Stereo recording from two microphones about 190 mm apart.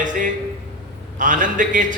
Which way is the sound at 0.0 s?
45° right (ahead or behind).